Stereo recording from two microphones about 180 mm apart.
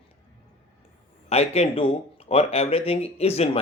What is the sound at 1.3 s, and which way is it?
Speech, 35° left (ahead or behind).